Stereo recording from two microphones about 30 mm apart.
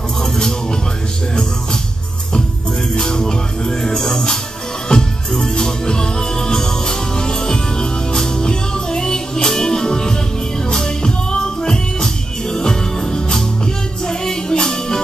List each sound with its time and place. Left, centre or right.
0.2 s music: centre
3.0 s music: left